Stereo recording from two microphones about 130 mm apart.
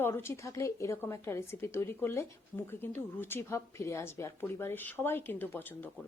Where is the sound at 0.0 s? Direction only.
20° left (ahead or behind).